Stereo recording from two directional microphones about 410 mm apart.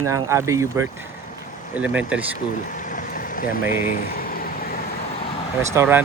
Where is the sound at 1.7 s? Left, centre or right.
Centre.